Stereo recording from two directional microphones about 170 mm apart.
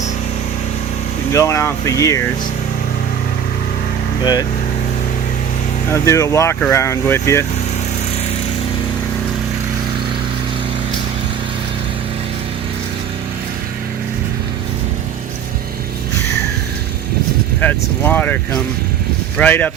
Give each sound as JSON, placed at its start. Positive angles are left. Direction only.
{"t": 1.3, "sound": "speech", "side_deg": 15}
{"t": 4.2, "sound": "speech", "side_deg": 25}
{"t": 5.9, "sound": "speech", "side_deg": 15}
{"t": 17.6, "sound": "speech", "side_deg": 10}